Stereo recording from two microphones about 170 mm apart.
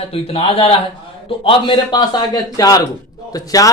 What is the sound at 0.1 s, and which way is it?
A man's voice, 35° left (ahead or behind).